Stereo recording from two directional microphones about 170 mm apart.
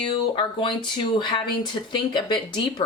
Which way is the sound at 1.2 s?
30° left (ahead or behind).